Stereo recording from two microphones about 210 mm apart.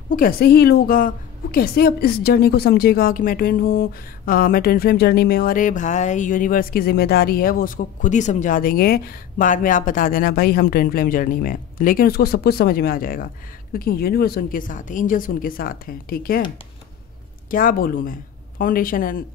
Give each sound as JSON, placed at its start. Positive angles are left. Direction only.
{"t": 0.1, "sound": "a woman's voice", "side_deg": 45}
{"t": 17.5, "sound": "speech", "side_deg": 40}